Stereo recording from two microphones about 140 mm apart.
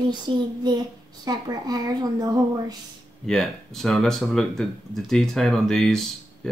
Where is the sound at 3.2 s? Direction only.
Centre (ahead or behind).